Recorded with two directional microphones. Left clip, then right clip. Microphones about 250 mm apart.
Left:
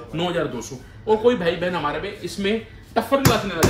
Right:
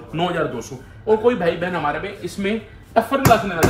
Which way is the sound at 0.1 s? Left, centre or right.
Centre.